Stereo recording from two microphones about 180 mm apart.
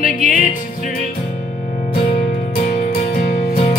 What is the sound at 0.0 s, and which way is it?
Music, 50° left (ahead or behind).